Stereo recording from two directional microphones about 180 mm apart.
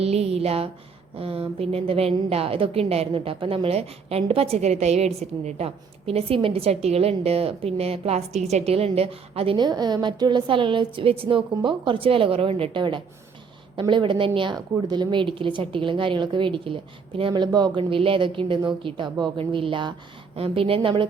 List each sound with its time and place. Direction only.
0.0 s a woman's voice: 35° right (ahead or behind)